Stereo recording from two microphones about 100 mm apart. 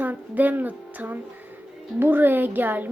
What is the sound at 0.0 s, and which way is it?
Speech, 15° right (ahead or behind).